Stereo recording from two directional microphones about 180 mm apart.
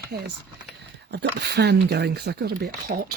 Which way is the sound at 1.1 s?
65° right (ahead or behind).